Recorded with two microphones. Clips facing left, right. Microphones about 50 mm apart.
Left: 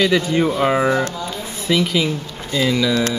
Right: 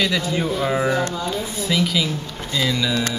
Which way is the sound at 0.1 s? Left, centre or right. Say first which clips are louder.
Left 5 dB; left.